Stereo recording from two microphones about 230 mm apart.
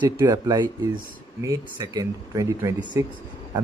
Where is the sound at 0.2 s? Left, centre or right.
Centre.